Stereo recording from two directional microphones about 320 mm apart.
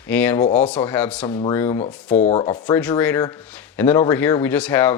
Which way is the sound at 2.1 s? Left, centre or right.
Left.